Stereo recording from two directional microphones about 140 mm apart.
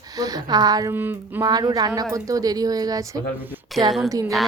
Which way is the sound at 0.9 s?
15° right (ahead or behind).